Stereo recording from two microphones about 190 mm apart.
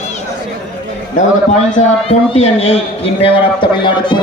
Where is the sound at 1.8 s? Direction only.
35° left (ahead or behind).